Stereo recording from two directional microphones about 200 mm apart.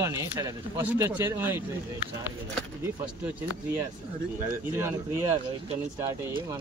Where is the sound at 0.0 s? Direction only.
15° right (ahead or behind).